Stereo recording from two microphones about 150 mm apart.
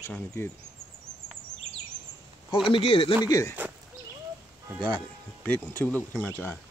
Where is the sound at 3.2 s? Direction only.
25° left (ahead or behind).